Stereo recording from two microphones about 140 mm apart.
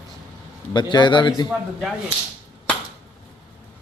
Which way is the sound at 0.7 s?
35° left (ahead or behind).